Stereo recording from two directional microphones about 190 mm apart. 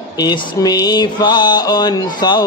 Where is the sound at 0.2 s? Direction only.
20° left (ahead or behind).